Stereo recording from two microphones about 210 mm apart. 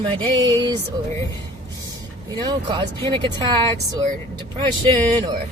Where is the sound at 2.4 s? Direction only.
20° right (ahead or behind).